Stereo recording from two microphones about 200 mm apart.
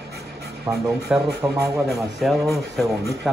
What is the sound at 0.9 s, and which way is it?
Speech, 5° right (ahead or behind).